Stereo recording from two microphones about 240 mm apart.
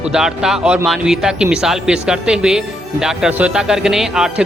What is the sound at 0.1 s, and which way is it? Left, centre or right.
A man's voice, centre.